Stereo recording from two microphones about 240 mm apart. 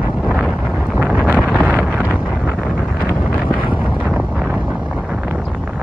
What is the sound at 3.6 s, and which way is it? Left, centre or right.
Wind noise, centre.